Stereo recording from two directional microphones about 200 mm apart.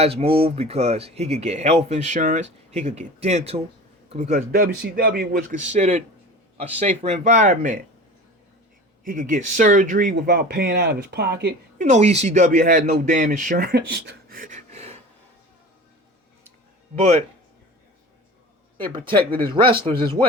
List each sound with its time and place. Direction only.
0.0 s speech: 30° right (ahead or behind)
9.0 s speech: 40° right (ahead or behind)
11.8 s speech: 35° right (ahead or behind)
16.9 s speech: 35° right (ahead or behind)
18.8 s speech: 25° right (ahead or behind)